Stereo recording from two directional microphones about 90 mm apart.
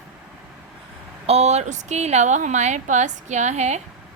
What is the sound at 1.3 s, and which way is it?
Speech, 90° right.